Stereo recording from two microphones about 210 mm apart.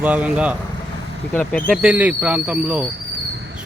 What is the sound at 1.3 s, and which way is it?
Speech, 5° left (ahead or behind).